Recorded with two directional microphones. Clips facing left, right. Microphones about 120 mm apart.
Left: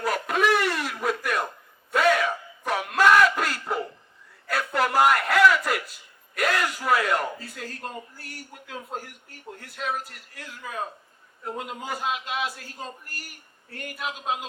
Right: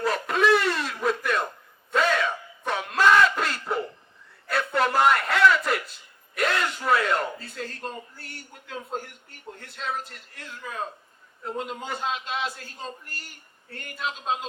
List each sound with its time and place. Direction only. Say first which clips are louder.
0.0 s a sound: right 1 dB; 25° right (ahead or behind)
11.4 s a man's voice: right 1 dB; 25° right (ahead or behind)
13.7 s a man's voice: even; 25° right (ahead or behind)